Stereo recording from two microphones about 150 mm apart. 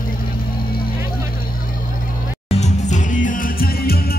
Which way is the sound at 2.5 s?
50° left (ahead or behind).